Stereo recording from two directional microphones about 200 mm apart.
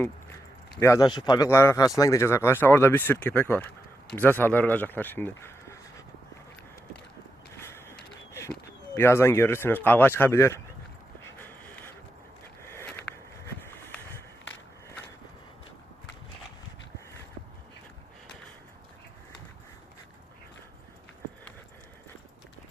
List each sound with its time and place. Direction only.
0.8 s speech: 15° left (ahead or behind)
7.6 s a sound: 10° left (ahead or behind)
9.0 s speech: 15° left (ahead or behind)
11.3 s dog: 10° left (ahead or behind)
12.6 s walk: 10° left (ahead or behind)
13.4 s a sound: 10° left (ahead or behind)